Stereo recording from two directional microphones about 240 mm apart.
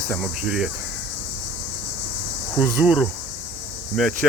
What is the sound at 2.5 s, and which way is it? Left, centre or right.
Cricket, centre.